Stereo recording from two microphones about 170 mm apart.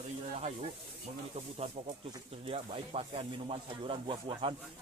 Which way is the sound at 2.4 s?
35° right (ahead or behind).